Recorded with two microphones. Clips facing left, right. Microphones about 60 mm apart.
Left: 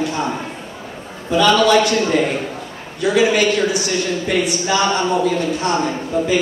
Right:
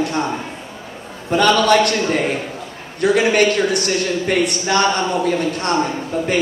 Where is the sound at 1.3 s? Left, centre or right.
Right.